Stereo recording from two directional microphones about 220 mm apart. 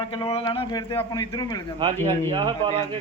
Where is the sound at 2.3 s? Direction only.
20° right (ahead or behind).